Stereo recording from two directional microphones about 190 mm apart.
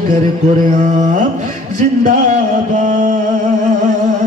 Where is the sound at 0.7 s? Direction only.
40° right (ahead or behind).